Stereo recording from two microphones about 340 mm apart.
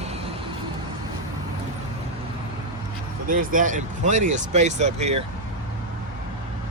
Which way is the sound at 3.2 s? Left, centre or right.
Right.